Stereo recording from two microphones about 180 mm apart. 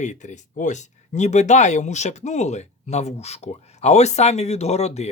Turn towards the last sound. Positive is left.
turn(degrees=35)  # may be behind; listen again after turning